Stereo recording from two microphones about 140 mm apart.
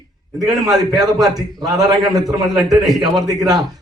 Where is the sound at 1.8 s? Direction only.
25° right (ahead or behind).